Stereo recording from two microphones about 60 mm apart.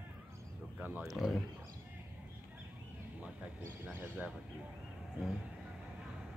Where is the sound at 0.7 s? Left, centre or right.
Right.